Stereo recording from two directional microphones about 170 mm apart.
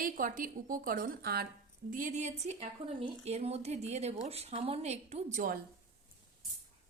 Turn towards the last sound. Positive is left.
turn(degrees=-50)  # may be behind; listen again after turning